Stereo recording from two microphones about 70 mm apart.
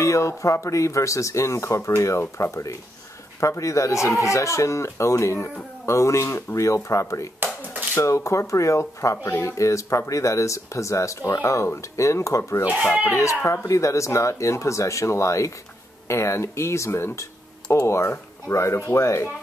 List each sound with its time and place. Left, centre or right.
0.0 s speech: left
13.4 s speech: left
13.7 s speech: left